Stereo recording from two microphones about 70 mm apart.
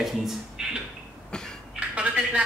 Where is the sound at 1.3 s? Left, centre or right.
Centre.